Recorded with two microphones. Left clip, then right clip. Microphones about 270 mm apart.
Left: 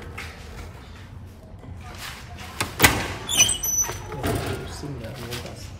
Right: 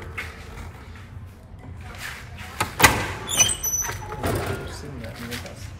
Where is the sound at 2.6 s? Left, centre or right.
Centre.